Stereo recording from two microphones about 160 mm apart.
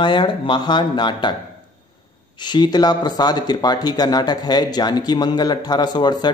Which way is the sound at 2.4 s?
25° left (ahead or behind).